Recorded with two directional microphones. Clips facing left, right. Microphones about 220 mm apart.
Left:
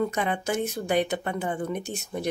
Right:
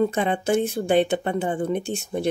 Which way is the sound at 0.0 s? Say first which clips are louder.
Right 5 dB; 30° right (ahead or behind).